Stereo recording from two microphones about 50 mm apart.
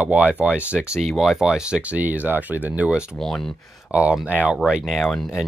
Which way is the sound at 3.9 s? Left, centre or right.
Right.